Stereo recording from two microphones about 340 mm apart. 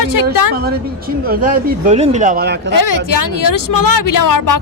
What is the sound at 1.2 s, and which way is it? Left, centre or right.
Speech, right.